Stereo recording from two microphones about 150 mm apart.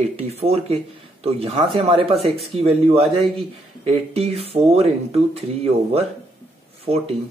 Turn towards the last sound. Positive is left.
turn(degrees=-40)  # may be behind; listen again after turning